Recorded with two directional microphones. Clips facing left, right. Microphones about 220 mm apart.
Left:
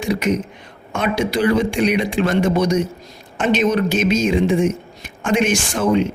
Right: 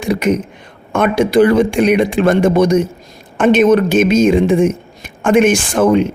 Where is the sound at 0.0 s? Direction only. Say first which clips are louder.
Right 4 dB; 55° right (ahead or behind).